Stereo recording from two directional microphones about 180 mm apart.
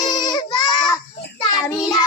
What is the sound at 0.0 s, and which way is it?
Goat, 25° left (ahead or behind).